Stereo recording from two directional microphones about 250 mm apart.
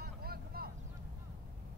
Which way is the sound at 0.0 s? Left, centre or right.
Right.